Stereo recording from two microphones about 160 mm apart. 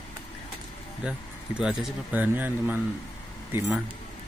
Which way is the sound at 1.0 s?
5° right (ahead or behind).